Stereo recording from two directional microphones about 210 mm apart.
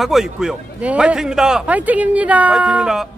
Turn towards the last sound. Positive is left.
turn(degrees=-5)  # may be behind; listen again after turning